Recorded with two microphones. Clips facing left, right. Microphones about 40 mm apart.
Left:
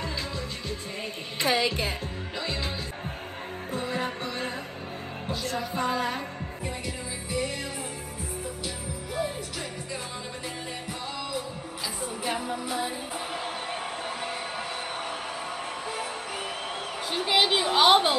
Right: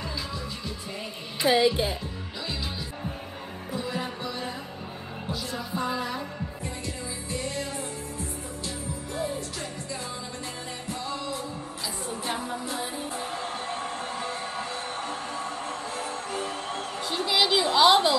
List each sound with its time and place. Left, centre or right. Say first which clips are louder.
1.4 s a woman's voice: right 4 dB; left
3.7 s music: left 1 dB; left
12.3 s music: left 2 dB; centre
17.1 s a sound: even; centre